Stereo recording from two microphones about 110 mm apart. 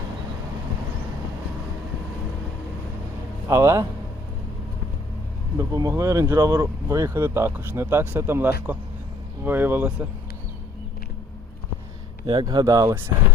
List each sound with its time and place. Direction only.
3.5 s speech: 25° right (ahead or behind)
5.5 s speech: 35° right (ahead or behind); by 10.1 s 15° right (ahead or behind)
12.2 s speech: 50° right (ahead or behind)
12.5 s speech: 35° right (ahead or behind)